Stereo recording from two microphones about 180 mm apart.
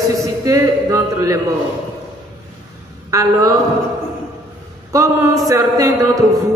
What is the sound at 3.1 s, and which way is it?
Speech, 15° right (ahead or behind).